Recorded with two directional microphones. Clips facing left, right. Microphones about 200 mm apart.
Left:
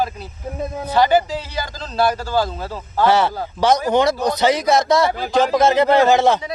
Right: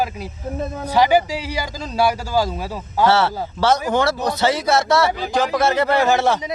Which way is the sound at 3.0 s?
15° left (ahead or behind).